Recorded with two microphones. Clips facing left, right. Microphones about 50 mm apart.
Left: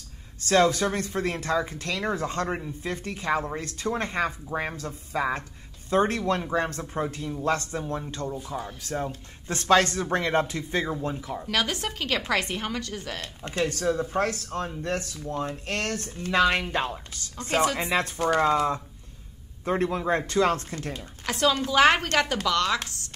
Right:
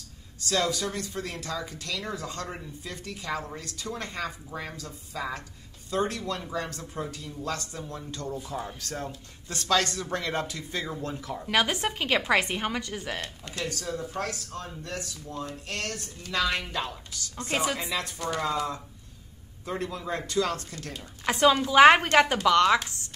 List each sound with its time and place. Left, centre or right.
0.4 s speech: left
8.5 s speech: centre
9.5 s speech: left; by 11.4 s centre
11.4 s a woman's voice: centre
13.4 s speech: left
21.3 s a woman's voice: centre